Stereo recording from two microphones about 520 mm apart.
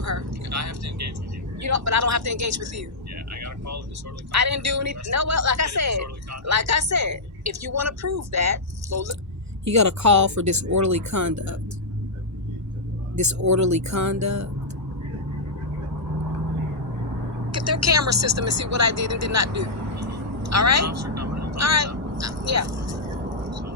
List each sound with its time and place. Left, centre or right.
0.0 s vehicle: right
1.5 s a woman's voice: right
13.1 s a woman's voice: right
17.5 s speech: right